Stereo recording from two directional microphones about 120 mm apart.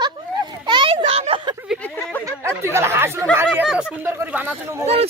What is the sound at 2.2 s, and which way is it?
Speech, 25° right (ahead or behind).